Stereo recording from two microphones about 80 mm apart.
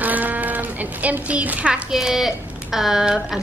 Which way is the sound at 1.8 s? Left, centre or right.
Centre.